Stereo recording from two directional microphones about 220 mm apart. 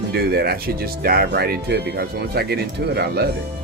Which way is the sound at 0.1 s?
45° right (ahead or behind).